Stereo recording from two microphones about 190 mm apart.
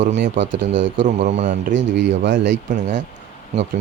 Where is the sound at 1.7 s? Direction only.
70° right (ahead or behind).